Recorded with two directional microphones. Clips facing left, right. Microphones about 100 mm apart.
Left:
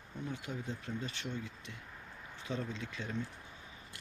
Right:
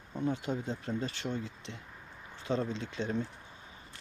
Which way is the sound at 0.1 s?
35° right (ahead or behind).